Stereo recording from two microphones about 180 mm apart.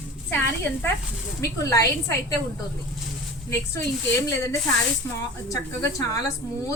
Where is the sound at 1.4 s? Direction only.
15° left (ahead or behind).